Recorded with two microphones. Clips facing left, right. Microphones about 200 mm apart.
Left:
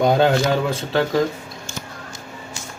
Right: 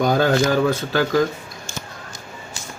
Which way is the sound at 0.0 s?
25° left (ahead or behind).